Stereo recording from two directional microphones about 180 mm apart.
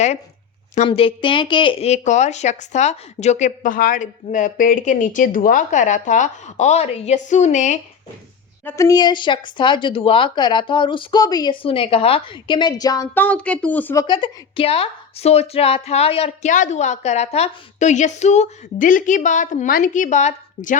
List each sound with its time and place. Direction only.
0.9 s speech: 30° left (ahead or behind)
8.6 s speech: 15° left (ahead or behind)
13.1 s a woman's voice: 10° left (ahead or behind); by 20.7 s 40° left (ahead or behind)